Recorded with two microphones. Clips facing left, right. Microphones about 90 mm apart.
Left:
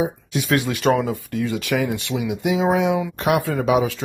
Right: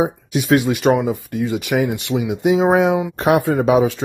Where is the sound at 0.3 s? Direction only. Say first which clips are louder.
Right 7 dB; 20° right (ahead or behind).